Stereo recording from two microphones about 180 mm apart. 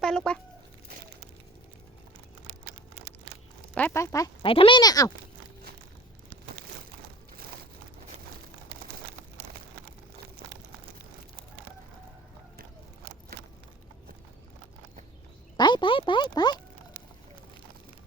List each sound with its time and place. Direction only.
0.0 s speech: 5° left (ahead or behind)
3.8 s speech: 10° left (ahead or behind)
4.4 s speech: 30° left (ahead or behind)
15.5 s a sound: 25° left (ahead or behind)